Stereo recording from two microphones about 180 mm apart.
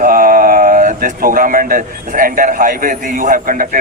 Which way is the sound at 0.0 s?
50° right (ahead or behind).